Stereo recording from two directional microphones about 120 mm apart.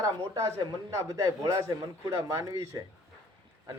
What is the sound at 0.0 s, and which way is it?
A man's voice, 25° right (ahead or behind).